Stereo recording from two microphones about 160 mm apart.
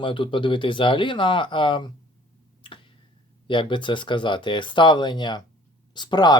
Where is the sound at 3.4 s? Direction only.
30° left (ahead or behind).